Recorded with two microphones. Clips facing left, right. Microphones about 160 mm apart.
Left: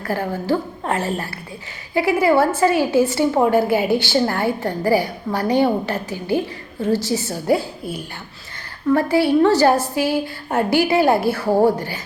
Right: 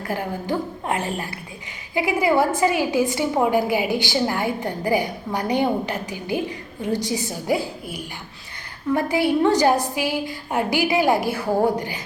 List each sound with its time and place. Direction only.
0.0 s a woman's voice: 15° right (ahead or behind)